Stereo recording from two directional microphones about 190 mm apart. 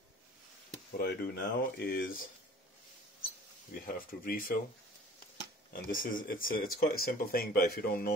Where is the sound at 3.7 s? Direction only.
45° left (ahead or behind).